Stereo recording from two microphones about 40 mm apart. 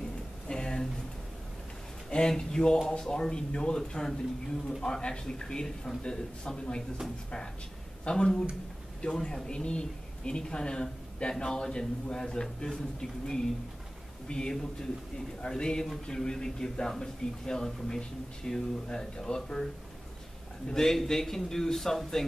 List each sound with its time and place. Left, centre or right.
0.5 s a sound: centre
2.0 s speech: centre
8.0 s speech: left
14.5 s speech: centre